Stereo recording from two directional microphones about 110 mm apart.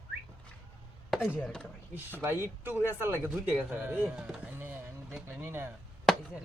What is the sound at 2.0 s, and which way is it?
Speech, 20° right (ahead or behind).